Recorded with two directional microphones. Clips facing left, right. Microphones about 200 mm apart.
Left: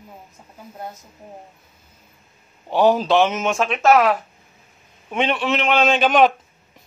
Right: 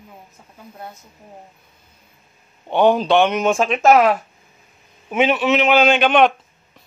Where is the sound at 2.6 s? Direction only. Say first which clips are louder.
Right 1 dB; 5° left (ahead or behind).